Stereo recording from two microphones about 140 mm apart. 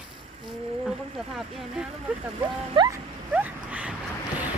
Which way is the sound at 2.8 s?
35° right (ahead or behind).